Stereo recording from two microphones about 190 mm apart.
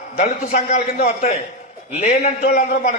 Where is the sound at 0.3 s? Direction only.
45° left (ahead or behind).